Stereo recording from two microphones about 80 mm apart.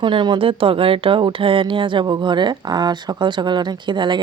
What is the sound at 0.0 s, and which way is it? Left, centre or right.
Speech, right.